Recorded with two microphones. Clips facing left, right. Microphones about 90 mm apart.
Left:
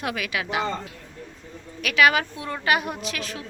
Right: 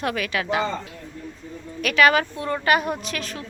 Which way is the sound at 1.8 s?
5° left (ahead or behind).